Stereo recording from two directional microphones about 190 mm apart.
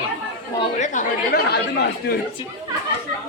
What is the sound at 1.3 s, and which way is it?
Speech, 60° left (ahead or behind).